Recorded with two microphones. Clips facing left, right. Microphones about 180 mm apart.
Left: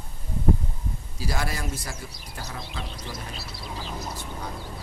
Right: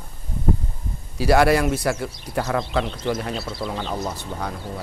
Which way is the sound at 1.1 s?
70° right (ahead or behind).